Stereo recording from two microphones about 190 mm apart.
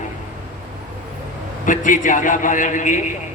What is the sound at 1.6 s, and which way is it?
A man's voice, 45° left (ahead or behind).